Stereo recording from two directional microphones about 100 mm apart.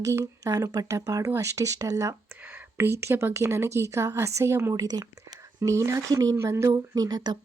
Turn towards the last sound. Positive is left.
turn(degrees=-40)  # may be behind; listen again after turning